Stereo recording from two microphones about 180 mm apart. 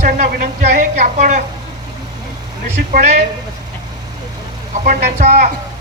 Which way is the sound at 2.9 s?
40° right (ahead or behind).